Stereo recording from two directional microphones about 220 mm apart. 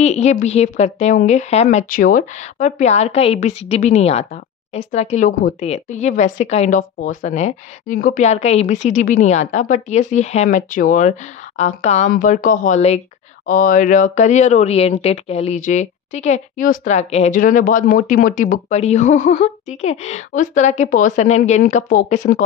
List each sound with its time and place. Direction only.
0.0 s speech: 30° left (ahead or behind)